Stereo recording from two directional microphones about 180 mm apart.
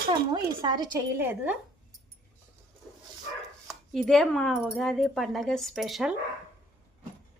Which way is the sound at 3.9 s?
Centre (ahead or behind).